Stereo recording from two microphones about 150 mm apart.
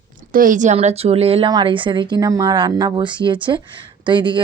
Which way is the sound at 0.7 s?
45° right (ahead or behind).